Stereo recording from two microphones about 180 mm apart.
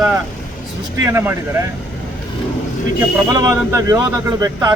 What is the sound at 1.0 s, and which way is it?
Speech, 10° right (ahead or behind).